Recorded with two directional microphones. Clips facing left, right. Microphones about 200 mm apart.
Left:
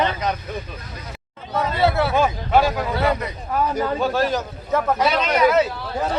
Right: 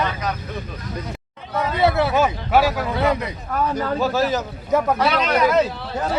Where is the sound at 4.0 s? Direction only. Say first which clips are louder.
Right 3 dB; centre (ahead or behind).